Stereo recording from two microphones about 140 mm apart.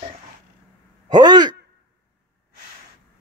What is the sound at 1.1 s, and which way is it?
Speech, 30° right (ahead or behind).